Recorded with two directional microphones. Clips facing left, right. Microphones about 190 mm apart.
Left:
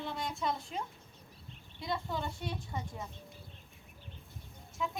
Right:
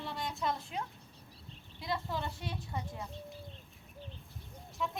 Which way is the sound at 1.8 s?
Centre (ahead or behind).